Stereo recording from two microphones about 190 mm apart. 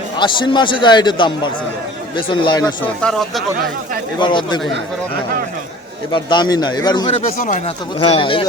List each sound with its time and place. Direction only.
0.2 s speech: 25° left (ahead or behind)
3.0 s speech: centre (ahead or behind)
4.2 s speech: 25° left (ahead or behind)
6.1 s speech: 25° left (ahead or behind)
7.1 s speech: 40° left (ahead or behind)